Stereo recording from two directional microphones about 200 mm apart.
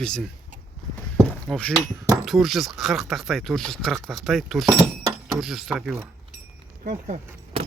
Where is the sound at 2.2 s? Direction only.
Centre (ahead or behind).